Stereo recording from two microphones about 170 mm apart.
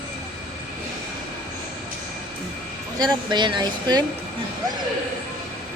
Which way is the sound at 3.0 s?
25° right (ahead or behind).